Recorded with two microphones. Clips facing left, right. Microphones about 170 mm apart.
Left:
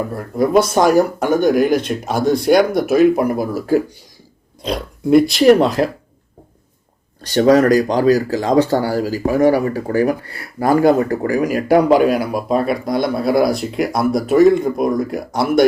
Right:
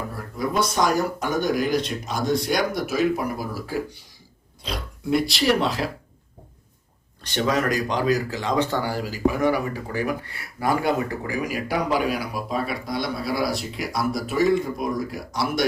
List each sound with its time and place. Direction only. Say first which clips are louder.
0.7 s speech: left 9 dB; 55° left (ahead or behind)
7.2 s speech: left 11 dB; 40° left (ahead or behind)